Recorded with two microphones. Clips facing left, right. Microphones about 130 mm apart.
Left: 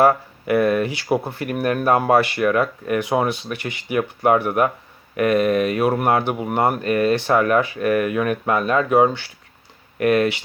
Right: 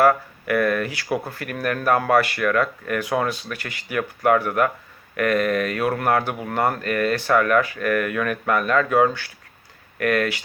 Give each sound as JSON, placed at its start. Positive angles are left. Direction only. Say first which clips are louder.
{"t": 0.0, "sound": "speech", "louder": "left 1 dB", "side_deg": 25}